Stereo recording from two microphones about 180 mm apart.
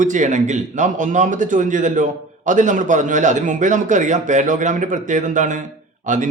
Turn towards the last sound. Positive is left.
turn(degrees=-45)  # may be behind; listen again after turning